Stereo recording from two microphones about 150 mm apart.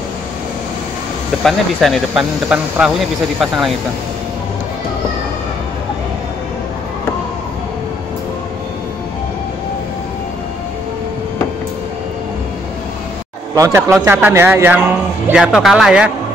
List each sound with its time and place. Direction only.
1.4 s speech: centre (ahead or behind)
13.6 s a man's voice: 20° right (ahead or behind)